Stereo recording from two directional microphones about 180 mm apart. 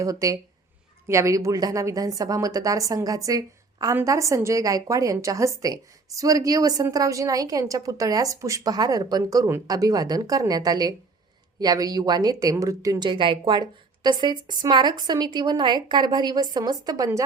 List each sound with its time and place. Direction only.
0.0 s a woman's voice: 20° right (ahead or behind)